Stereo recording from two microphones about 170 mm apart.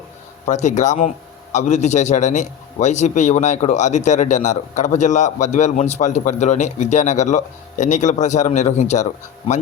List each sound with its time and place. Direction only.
0.4 s a man's voice: 45° left (ahead or behind)